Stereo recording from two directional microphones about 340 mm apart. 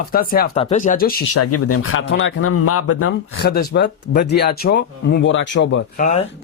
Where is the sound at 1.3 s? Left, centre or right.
Left.